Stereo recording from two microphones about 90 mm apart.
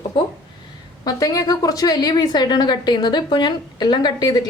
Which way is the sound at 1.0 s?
40° left (ahead or behind).